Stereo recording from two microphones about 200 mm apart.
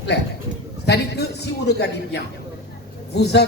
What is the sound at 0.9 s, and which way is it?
A man's voice, 55° left (ahead or behind).